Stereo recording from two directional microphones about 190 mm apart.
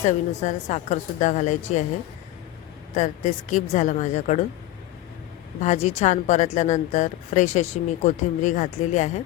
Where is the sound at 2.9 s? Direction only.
40° left (ahead or behind).